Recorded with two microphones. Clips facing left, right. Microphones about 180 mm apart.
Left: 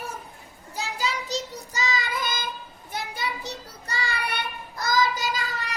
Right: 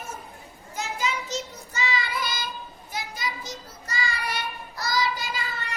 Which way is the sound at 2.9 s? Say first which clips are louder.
Left 2 dB; 60° left (ahead or behind).